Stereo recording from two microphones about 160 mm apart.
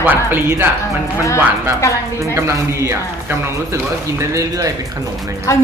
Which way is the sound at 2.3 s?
20° right (ahead or behind).